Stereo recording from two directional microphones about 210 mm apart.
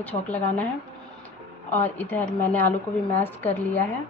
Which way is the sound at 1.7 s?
10° left (ahead or behind).